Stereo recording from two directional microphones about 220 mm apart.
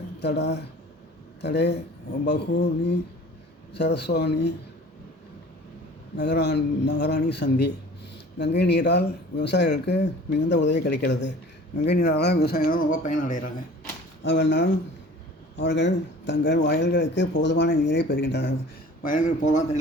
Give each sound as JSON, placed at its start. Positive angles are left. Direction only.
{"t": 0.2, "sound": "speech", "side_deg": 50}
{"t": 6.1, "sound": "speech", "side_deg": 50}
{"t": 14.3, "sound": "speech", "side_deg": 55}
{"t": 19.0, "sound": "speech", "side_deg": 35}